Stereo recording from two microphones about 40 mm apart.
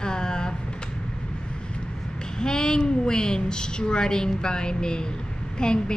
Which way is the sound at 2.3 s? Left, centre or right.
Centre.